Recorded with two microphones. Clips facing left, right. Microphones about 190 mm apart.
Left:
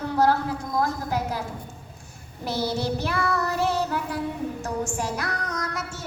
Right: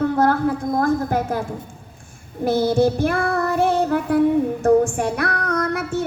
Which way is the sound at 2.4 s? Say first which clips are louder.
Right 10 dB; 50° right (ahead or behind).